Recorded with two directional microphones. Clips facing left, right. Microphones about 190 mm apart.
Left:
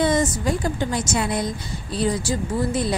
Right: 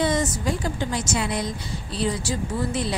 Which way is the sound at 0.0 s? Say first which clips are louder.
Left 3 dB; 50° left (ahead or behind).